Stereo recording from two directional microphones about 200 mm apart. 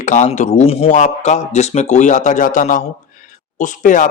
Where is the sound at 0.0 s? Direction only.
40° left (ahead or behind).